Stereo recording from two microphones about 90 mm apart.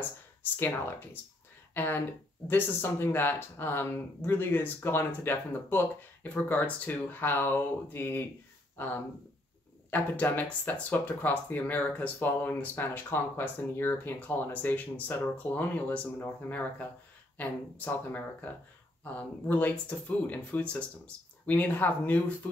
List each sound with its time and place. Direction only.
0.6 s speech: 25° left (ahead or behind)